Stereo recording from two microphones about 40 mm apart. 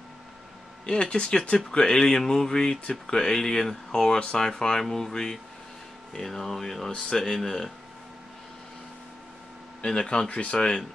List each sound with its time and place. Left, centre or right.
0.8 s speech: left
9.8 s speech: left